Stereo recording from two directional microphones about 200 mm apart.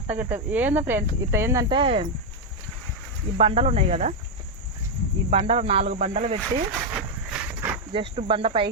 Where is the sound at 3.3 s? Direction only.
30° right (ahead or behind).